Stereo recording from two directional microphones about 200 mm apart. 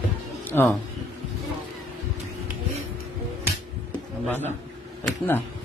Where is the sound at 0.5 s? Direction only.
10° left (ahead or behind).